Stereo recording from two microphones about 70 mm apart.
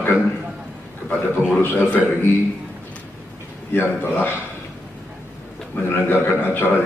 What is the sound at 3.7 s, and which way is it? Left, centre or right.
Speech, left.